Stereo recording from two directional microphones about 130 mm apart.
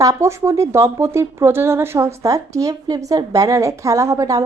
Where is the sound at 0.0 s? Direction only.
25° right (ahead or behind).